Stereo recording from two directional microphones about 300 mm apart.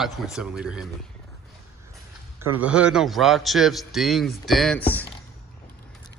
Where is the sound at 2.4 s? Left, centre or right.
Centre.